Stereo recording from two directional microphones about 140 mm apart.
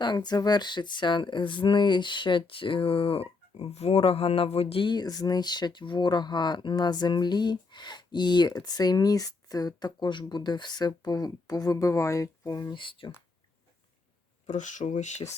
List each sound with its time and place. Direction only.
0.0 s speech: 30° left (ahead or behind)
12.8 s speech: 40° left (ahead or behind)
14.4 s speech: 60° left (ahead or behind)